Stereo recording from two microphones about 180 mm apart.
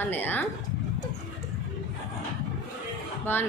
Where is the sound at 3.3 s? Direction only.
10° left (ahead or behind).